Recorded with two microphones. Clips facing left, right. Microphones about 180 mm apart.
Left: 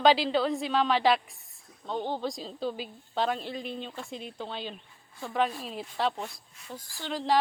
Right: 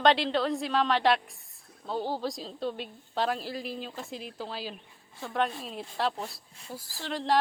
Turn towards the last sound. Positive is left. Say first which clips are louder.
# even
turn(degrees=0)  # may be behind; listen again after turning